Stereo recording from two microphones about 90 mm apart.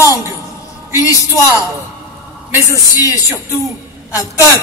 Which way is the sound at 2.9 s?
40° left (ahead or behind).